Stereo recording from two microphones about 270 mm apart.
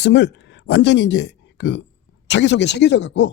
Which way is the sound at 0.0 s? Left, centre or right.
Left.